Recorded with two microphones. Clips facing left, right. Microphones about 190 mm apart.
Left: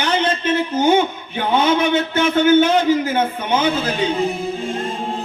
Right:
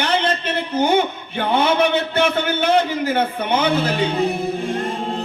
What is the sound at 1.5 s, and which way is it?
A man's voice, 60° right (ahead or behind).